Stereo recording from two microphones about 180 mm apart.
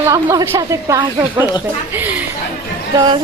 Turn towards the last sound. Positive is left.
turn(degrees=-25)  # may be behind; listen again after turning